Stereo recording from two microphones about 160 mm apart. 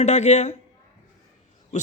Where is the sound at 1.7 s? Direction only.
50° left (ahead or behind).